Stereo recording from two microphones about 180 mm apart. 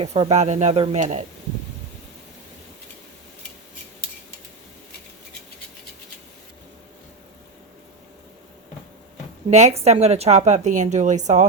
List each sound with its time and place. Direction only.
0.0 s a woman's voice: 35° right (ahead or behind)
9.5 s a woman's voice: 40° right (ahead or behind)